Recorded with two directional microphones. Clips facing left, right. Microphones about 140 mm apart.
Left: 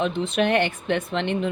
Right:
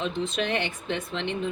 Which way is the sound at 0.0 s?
60° left (ahead or behind).